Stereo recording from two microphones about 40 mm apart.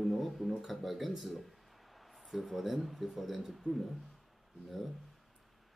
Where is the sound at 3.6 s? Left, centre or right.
Right.